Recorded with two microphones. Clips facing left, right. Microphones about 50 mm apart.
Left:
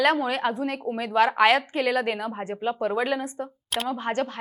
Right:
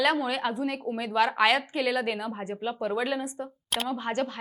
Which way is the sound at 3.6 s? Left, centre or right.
Centre.